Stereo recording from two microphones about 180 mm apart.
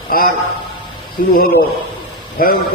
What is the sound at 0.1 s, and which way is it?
Speech, 55° left (ahead or behind).